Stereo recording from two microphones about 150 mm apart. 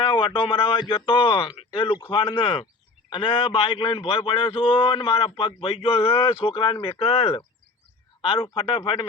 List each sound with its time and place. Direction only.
0.0 s a man's voice: 35° left (ahead or behind)